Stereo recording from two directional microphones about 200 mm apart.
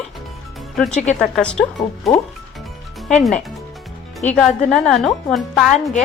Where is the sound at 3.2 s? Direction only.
Centre (ahead or behind).